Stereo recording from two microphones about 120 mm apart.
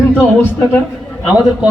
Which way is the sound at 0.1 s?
15° left (ahead or behind).